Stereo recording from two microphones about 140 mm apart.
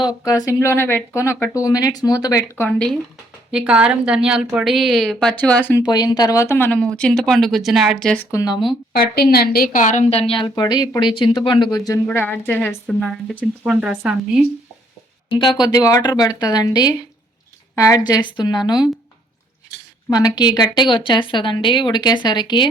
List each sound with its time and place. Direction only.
0.0 s speech: 30° left (ahead or behind); by 2.9 s 10° left (ahead or behind)
3.5 s a woman's voice: 5° right (ahead or behind)
5.4 s speech: 10° left (ahead or behind)
5.8 s speech: 30° left (ahead or behind); by 8.3 s 10° left (ahead or behind)
8.3 s speech: 20° left (ahead or behind)
8.9 s a woman's voice: 90° left; by 11.8 s 35° left (ahead or behind)
12.0 s speech: 15° left (ahead or behind)
13.7 s a woman's voice: 5° right (ahead or behind)
15.4 s speech: 30° left (ahead or behind)
20.1 s a woman's voice: 25° left (ahead or behind)